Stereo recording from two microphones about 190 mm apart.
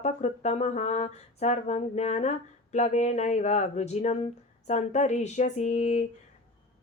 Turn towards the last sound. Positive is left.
turn(degrees=35)  # may be behind; listen again after turning